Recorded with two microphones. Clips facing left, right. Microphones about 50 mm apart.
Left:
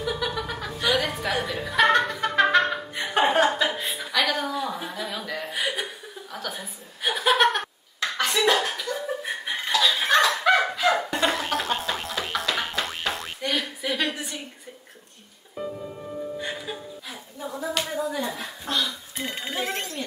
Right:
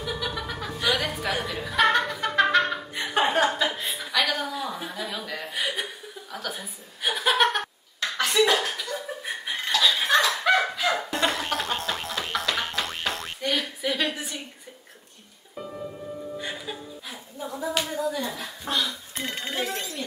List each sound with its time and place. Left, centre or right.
0.0 s chuckle: centre
10.2 s a sound: centre
16.3 s music: centre
17.4 s clapping: centre
18.7 s telephone bell ringing: centre
19.6 s a sound: left